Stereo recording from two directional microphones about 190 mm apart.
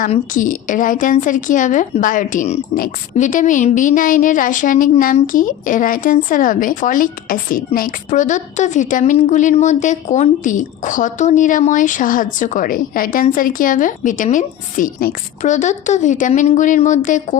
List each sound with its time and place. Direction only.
0.1 s a woman's voice: 45° left (ahead or behind)